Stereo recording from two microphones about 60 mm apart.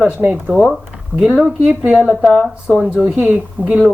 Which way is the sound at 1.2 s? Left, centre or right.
Centre.